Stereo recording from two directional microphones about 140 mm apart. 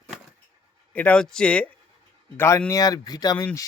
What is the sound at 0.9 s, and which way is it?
Speech, 10° left (ahead or behind).